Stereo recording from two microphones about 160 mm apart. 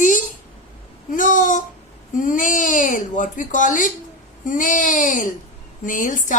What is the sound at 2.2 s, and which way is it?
A woman's voice, 55° left (ahead or behind).